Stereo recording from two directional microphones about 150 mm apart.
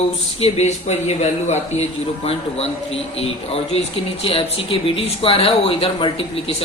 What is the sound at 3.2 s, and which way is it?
Speech, 40° left (ahead or behind).